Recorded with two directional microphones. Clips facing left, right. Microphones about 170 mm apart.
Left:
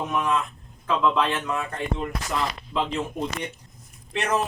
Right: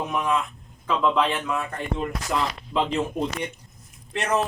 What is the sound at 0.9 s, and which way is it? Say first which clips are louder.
Speech: even; 15° right (ahead or behind).